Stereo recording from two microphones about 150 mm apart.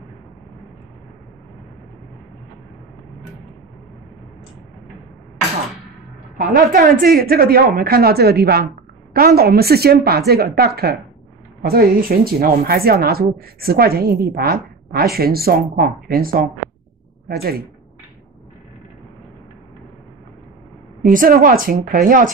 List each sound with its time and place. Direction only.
6.3 s speech: 70° right (ahead or behind)
17.3 s speech: 90° right
21.0 s a woman's voice: 65° right (ahead or behind)